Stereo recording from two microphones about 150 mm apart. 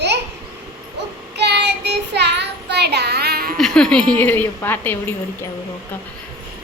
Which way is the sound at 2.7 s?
90° right.